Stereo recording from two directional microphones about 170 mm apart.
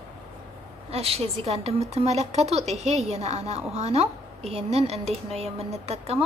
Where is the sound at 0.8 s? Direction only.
35° right (ahead or behind).